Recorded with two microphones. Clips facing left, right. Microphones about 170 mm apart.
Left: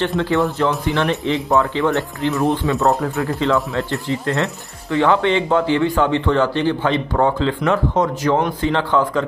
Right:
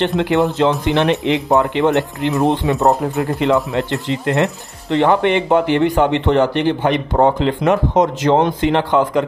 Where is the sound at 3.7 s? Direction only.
20° right (ahead or behind).